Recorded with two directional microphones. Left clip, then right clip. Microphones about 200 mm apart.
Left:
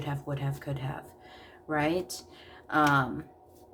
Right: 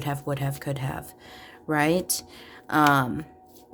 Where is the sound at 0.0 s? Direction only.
50° right (ahead or behind).